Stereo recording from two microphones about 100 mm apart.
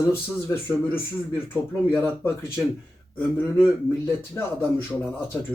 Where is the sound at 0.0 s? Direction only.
25° left (ahead or behind).